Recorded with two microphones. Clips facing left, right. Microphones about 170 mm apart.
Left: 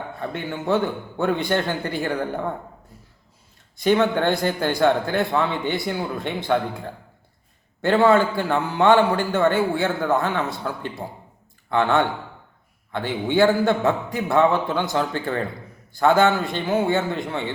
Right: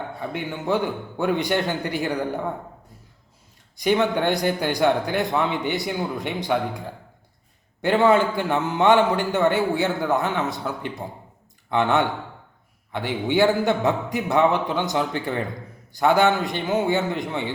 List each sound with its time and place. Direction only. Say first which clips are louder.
0.2 s a man's voice: left 2 dB; 15° right (ahead or behind)
3.8 s a man's voice: left 2 dB; 15° right (ahead or behind)